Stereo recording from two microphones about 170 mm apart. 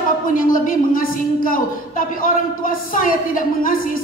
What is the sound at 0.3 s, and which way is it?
A woman's voice, 55° left (ahead or behind).